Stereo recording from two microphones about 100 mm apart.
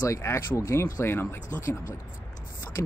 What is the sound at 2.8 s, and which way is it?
Speech, 25° left (ahead or behind).